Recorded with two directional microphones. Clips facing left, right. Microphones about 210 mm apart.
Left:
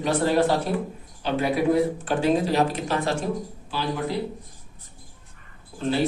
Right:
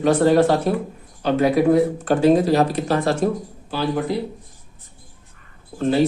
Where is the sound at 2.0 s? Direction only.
40° right (ahead or behind).